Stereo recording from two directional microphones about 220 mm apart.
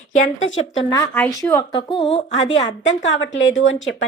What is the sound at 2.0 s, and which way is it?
Speech, 25° left (ahead or behind).